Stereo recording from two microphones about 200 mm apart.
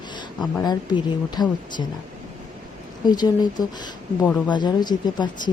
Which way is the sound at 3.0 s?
20° left (ahead or behind).